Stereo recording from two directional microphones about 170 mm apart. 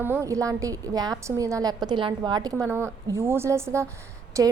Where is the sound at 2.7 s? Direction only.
15° right (ahead or behind).